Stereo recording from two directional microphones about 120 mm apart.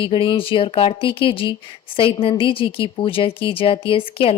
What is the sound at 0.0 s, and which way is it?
Speech, 45° left (ahead or behind).